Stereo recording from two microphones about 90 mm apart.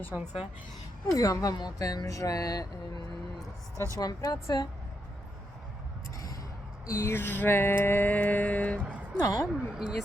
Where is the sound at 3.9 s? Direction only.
45° left (ahead or behind).